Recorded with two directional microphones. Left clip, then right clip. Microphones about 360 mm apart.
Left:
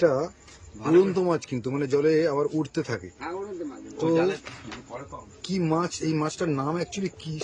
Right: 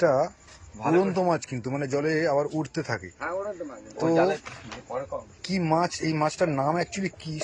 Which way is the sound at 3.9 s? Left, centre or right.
Centre.